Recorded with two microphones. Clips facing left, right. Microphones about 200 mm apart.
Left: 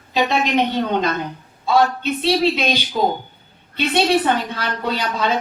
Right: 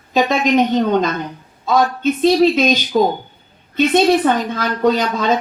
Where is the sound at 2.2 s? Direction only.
45° right (ahead or behind).